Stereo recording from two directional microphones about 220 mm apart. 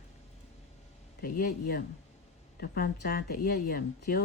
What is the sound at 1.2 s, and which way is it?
Speech, 40° left (ahead or behind).